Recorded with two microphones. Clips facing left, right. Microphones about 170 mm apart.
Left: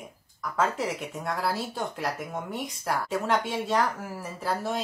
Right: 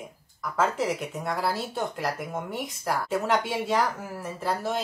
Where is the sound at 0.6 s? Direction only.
Centre (ahead or behind).